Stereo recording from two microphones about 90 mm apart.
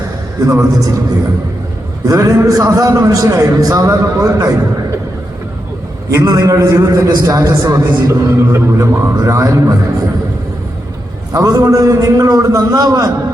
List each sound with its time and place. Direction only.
0.4 s a man's voice: 40° right (ahead or behind)
2.0 s a man's voice: 40° right (ahead or behind)
6.1 s a man's voice: 40° right (ahead or behind)
11.3 s a man's voice: 40° right (ahead or behind)